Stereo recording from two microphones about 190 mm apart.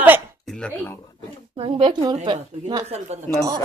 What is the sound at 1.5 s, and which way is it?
Speech, 30° right (ahead or behind).